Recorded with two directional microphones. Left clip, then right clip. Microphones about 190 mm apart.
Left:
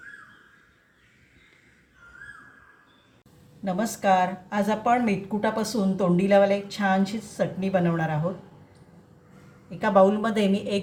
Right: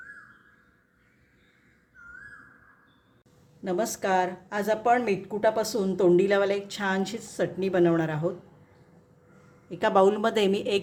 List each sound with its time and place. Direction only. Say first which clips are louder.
3.6 s speech: left 1 dB; 60° right (ahead or behind)
9.6 s speech: left 2 dB; 65° right (ahead or behind)